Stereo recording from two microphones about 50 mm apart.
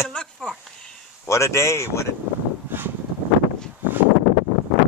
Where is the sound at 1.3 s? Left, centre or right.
Left.